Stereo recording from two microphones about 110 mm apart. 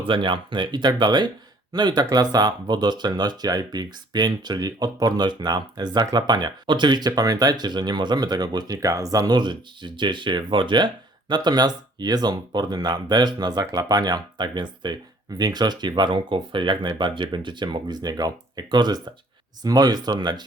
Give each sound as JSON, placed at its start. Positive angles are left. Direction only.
{"t": 0.1, "sound": "speech", "side_deg": -50}